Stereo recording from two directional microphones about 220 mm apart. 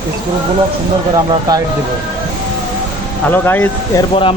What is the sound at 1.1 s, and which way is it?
Speech, 15° right (ahead or behind).